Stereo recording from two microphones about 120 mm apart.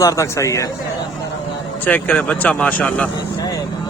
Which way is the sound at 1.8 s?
10° left (ahead or behind).